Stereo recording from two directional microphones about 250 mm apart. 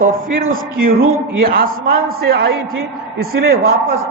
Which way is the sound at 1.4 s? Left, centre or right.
Right.